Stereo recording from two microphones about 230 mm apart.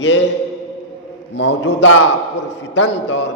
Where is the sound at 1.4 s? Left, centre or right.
Left.